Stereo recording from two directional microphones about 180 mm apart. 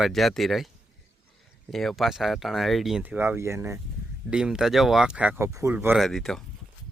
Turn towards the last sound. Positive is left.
turn(degrees=0)  # may be behind; listen again after turning